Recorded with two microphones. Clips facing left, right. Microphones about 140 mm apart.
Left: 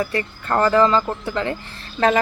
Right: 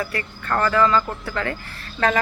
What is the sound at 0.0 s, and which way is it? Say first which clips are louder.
Speech: left 4 dB; 25° left (ahead or behind).